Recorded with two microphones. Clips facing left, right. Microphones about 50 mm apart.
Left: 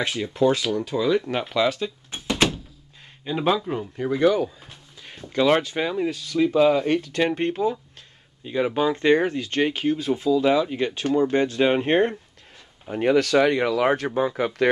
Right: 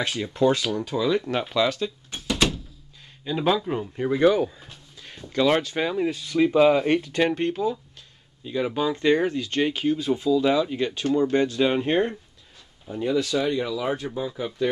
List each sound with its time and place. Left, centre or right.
0.4 s speech: centre
0.8 s speech: centre
2.2 s door: left
3.3 s speech: centre
3.9 s speech: centre
5.2 s speech: centre
5.8 s speech: centre
6.1 s speech: centre
7.3 s speech: left
10.4 s speech: centre
11.0 s speech: left
12.8 s speech: left